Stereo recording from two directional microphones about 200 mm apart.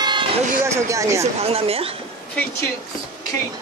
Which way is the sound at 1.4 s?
30° right (ahead or behind).